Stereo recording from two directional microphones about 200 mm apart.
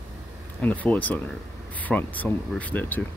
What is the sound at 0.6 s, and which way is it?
Speech, 5° left (ahead or behind).